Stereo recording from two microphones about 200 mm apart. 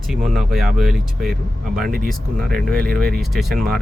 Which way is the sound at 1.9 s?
45° right (ahead or behind).